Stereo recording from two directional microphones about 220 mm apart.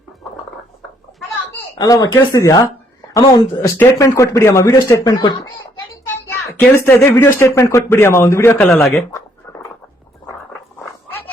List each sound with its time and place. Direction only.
1.8 s speech: 15° left (ahead or behind)
6.6 s speech: 10° left (ahead or behind)
8.9 s a sound: 10° left (ahead or behind)